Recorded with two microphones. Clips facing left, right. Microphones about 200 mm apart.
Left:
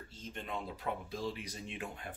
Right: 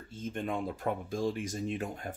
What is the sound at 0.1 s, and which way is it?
Speech, 50° right (ahead or behind).